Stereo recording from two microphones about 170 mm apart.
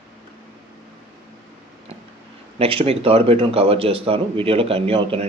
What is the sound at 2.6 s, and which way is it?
Speech, 35° right (ahead or behind).